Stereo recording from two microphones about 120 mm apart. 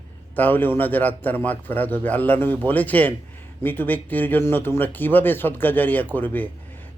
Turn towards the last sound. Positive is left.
turn(degrees=15)  # may be behind; listen again after turning